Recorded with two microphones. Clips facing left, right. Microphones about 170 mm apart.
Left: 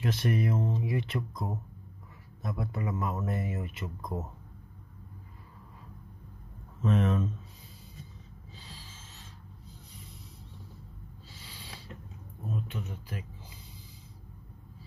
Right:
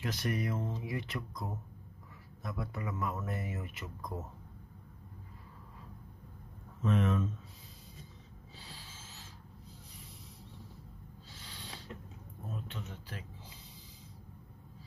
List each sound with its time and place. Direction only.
0.0 s speech: 25° left (ahead or behind)
6.8 s speech: 35° left (ahead or behind)
12.6 s speech: 10° left (ahead or behind)